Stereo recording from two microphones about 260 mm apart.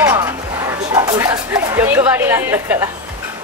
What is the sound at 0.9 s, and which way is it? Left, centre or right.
Dog, centre.